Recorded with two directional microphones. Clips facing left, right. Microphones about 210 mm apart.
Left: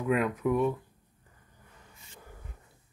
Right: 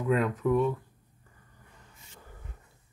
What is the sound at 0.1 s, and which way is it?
Speech, 10° left (ahead or behind).